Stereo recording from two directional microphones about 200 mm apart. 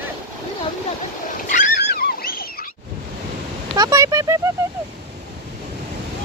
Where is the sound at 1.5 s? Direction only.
50° left (ahead or behind).